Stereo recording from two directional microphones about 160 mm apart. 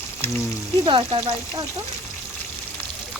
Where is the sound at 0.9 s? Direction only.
30° right (ahead or behind).